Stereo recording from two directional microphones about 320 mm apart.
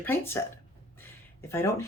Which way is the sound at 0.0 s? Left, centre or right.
Centre.